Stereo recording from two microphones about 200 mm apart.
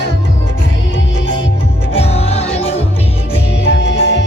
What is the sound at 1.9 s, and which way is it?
Music, 30° left (ahead or behind).